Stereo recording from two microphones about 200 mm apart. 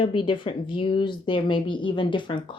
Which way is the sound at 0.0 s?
25° left (ahead or behind).